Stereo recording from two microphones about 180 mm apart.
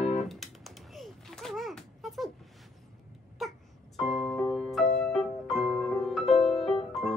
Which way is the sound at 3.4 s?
Centre (ahead or behind).